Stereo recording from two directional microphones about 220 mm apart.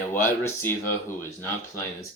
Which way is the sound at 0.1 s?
10° left (ahead or behind).